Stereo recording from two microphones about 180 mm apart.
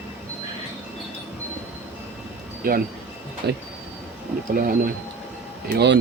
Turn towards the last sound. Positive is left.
turn(degrees=-75)  # may be behind; listen again after turning